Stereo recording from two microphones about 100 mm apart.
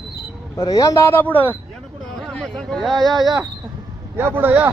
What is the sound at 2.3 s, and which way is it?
Speech, 5° left (ahead or behind).